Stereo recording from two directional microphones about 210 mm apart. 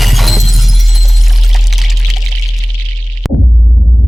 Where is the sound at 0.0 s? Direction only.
Centre (ahead or behind).